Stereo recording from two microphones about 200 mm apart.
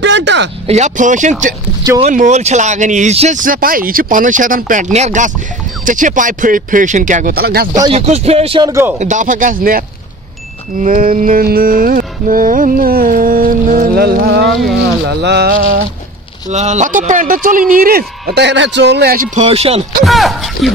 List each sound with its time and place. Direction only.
0.0 s a sound: 65° right (ahead or behind)
0.7 s speech: 35° right (ahead or behind)
7.9 s speech: 30° right (ahead or behind); by 8.9 s 15° right (ahead or behind)
9.0 s speech: 40° right (ahead or behind)
10.8 s mantra: 40° right (ahead or behind)
15.0 s speech: 55° right (ahead or behind)
16.4 s mantra: 35° right (ahead or behind)
19.4 s speech: 30° right (ahead or behind)
20.1 s speech: centre (ahead or behind)